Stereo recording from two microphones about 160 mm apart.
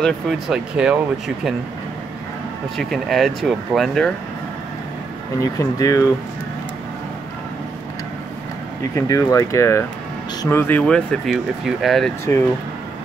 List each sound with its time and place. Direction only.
0.0 s speech: centre (ahead or behind)
2.8 s speech: centre (ahead or behind)
5.4 s speech: 20° left (ahead or behind)
8.9 s speech: 20° left (ahead or behind); by 12.1 s centre (ahead or behind)